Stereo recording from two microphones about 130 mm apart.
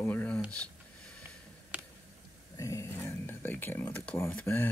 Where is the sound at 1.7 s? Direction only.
10° right (ahead or behind).